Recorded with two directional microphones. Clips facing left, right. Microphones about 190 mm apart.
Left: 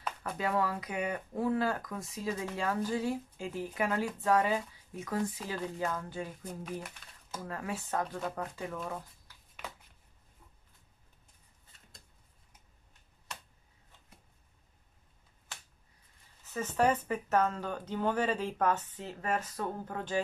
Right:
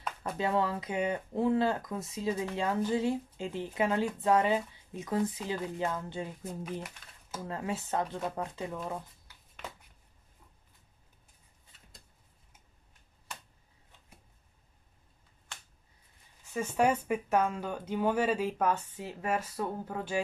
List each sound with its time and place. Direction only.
0.4 s speech: 25° right (ahead or behind)
6.6 s speech: 5° right (ahead or behind)
7.3 s speech: 25° right (ahead or behind)
16.4 s speech: 10° right (ahead or behind)